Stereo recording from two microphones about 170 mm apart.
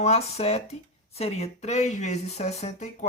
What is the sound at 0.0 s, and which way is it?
Speech, 40° left (ahead or behind).